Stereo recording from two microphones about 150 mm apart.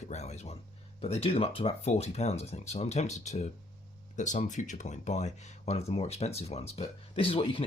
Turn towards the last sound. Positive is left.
turn(degrees=35)  # may be behind; listen again after turning